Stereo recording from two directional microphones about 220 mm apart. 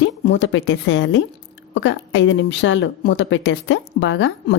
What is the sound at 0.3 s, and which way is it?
A woman's voice, 55° left (ahead or behind).